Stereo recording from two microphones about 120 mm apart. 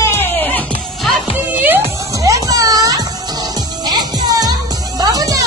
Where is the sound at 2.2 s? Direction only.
30° right (ahead or behind).